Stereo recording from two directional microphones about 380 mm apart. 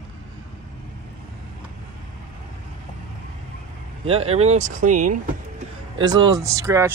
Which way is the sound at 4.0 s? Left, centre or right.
Centre.